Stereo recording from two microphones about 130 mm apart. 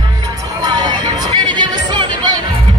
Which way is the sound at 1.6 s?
40° right (ahead or behind).